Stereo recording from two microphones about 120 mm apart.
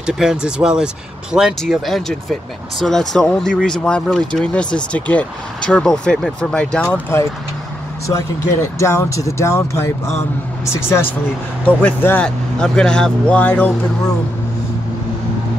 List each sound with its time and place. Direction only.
0.0 s speech: 5° right (ahead or behind)
8.7 s speech: 25° left (ahead or behind)